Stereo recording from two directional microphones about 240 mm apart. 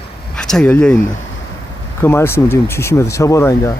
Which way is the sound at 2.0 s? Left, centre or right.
Centre.